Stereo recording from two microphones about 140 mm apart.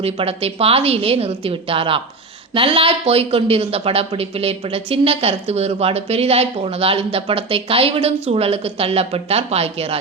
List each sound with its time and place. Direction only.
0.0 s speech: 45° right (ahead or behind)